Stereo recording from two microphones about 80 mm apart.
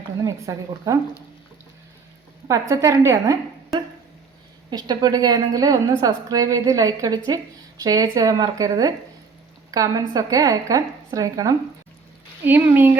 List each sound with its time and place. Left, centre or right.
0.2 s a woman's voice: right
2.5 s a woman's voice: right
4.7 s a woman's voice: right
12.5 s speech: right